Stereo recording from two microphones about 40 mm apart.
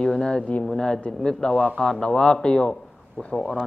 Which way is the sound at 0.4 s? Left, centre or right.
Left.